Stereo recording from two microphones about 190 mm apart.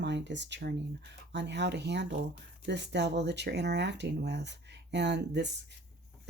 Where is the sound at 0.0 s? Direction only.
65° right (ahead or behind).